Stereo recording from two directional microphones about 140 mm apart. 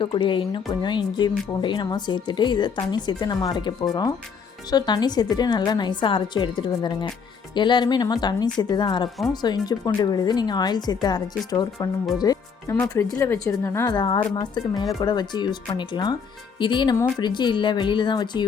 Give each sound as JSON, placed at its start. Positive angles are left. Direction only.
{"t": 0.0, "sound": "a woman's voice", "side_deg": 35}